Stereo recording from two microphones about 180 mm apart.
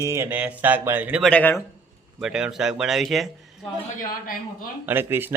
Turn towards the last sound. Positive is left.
turn(degrees=-10)  # may be behind; listen again after turning